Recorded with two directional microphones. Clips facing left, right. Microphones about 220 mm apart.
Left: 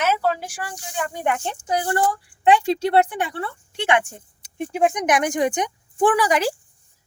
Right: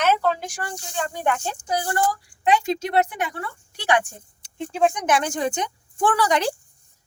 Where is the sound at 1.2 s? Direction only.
20° left (ahead or behind).